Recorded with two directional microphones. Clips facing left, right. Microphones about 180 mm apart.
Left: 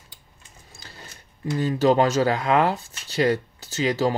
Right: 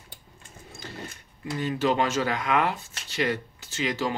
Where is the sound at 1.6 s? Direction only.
35° left (ahead or behind).